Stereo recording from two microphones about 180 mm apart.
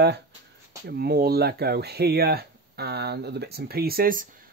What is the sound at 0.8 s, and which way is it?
Speech, 60° right (ahead or behind).